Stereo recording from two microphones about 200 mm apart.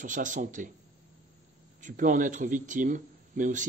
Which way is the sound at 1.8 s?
40° right (ahead or behind).